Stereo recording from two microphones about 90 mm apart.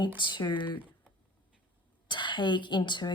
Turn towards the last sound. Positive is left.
turn(degrees=55)  # may be behind; listen again after turning